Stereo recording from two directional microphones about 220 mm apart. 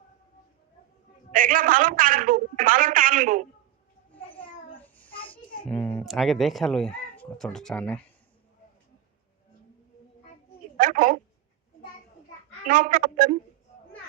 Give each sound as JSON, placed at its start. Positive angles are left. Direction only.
{"t": 1.3, "sound": "a man's voice", "side_deg": -40}
{"t": 4.8, "sound": "child singing", "side_deg": 5}
{"t": 5.3, "sound": "a sound", "side_deg": 10}
{"t": 6.1, "sound": "speech", "side_deg": 0}
{"t": 10.8, "sound": "a woman's voice", "side_deg": -40}
{"t": 12.6, "sound": "speech", "side_deg": -40}